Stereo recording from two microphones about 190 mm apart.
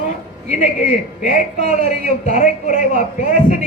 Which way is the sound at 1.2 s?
40° left (ahead or behind).